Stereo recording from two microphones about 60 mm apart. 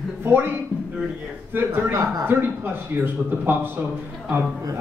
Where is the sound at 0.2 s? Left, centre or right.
Right.